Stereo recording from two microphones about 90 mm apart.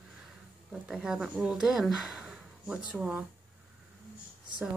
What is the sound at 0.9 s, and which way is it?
Speech, centre (ahead or behind).